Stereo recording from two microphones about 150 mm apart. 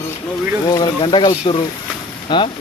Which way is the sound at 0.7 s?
30° left (ahead or behind).